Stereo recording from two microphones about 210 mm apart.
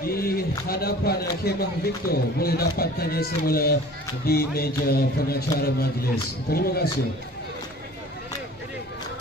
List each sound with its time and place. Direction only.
0.0 s a man's voice: 45° left (ahead or behind)